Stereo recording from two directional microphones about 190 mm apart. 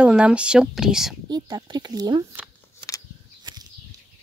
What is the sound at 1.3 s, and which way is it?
Speech, 20° right (ahead or behind).